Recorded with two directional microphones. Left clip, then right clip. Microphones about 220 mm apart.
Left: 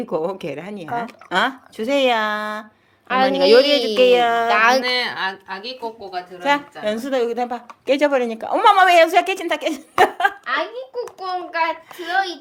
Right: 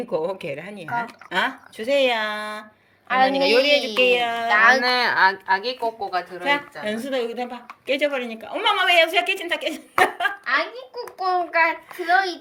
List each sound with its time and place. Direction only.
0.1 s a woman's voice: 20° left (ahead or behind)
3.1 s speech: 50° left (ahead or behind)
3.4 s a woman's voice: 20° left (ahead or behind)
4.4 s speech: 50° left (ahead or behind)
4.9 s a woman's voice: 10° right (ahead or behind)
6.4 s a woman's voice: 15° left (ahead or behind)